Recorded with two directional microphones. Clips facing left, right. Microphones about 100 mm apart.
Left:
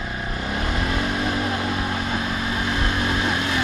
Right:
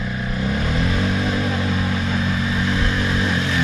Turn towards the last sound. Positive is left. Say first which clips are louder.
# right 1 dB
turn(degrees=20)  # may be behind; listen again after turning